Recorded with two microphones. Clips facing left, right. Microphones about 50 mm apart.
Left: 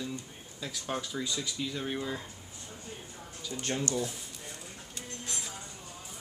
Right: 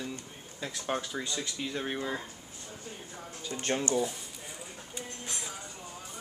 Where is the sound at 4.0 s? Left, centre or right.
Centre.